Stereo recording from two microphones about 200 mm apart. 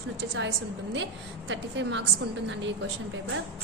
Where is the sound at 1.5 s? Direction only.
65° right (ahead or behind).